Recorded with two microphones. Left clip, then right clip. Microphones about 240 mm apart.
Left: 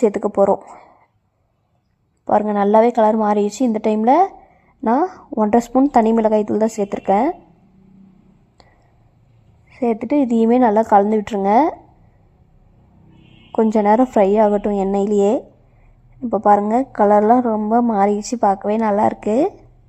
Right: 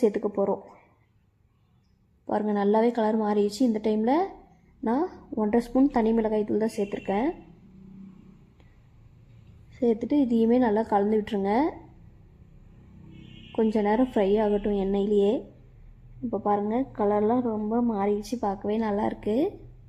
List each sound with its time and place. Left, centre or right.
0.0 s a woman's voice: left
2.2 s a woman's voice: left
9.7 s speech: left
10.1 s a woman's voice: left
13.7 s a woman's voice: left